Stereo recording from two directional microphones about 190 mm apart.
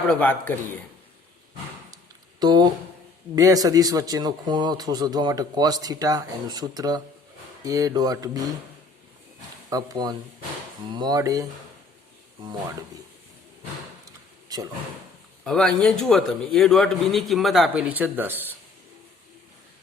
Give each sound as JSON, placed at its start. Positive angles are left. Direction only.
{"t": 0.1, "sound": "speech", "side_deg": 10}
{"t": 2.4, "sound": "speech", "side_deg": -20}
{"t": 9.6, "sound": "speech", "side_deg": -20}
{"t": 15.4, "sound": "a man's voice", "side_deg": 5}